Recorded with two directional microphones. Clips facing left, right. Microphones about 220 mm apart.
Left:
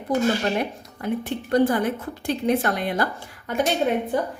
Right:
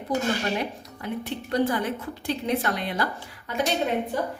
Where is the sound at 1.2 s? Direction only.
50° left (ahead or behind).